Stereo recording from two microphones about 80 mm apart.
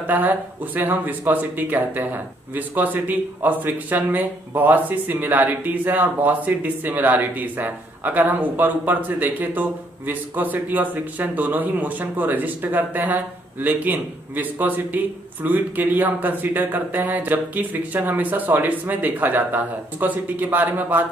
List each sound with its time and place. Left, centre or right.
0.0 s speech: right